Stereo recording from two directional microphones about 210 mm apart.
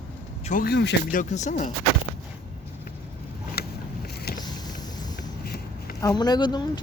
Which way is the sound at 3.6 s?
50° left (ahead or behind).